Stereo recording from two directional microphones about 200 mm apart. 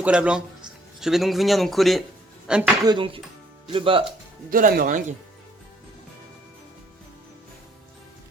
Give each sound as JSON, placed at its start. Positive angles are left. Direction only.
{"t": 0.0, "sound": "speech", "side_deg": -5}
{"t": 2.8, "sound": "speech", "side_deg": -25}
{"t": 4.5, "sound": "speech", "side_deg": -45}